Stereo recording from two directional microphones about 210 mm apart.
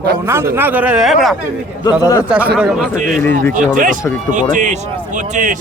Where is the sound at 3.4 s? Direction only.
40° right (ahead or behind).